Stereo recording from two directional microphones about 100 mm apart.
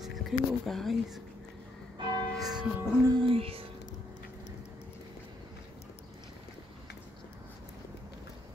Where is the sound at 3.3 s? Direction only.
70° right (ahead or behind).